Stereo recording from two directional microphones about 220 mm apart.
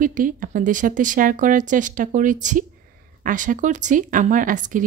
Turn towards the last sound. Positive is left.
turn(degrees=-35)  # may be behind; listen again after turning